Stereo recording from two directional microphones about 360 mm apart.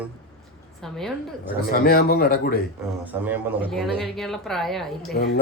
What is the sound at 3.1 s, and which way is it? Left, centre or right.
A man's voice, centre.